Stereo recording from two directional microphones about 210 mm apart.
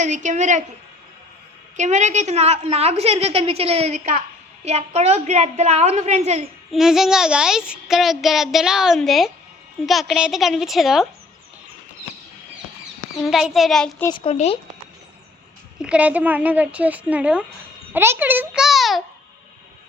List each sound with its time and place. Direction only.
0.0 s a woman's voice: 35° right (ahead or behind)
1.7 s a woman's voice: 35° right (ahead or behind)
6.7 s a child's voice: centre (ahead or behind)
13.2 s a child's voice: centre (ahead or behind)
14.1 s speech: 30° left (ahead or behind)
15.8 s a child's voice: 5° right (ahead or behind)